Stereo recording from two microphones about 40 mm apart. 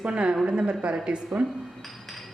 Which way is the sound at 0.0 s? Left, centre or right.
Right.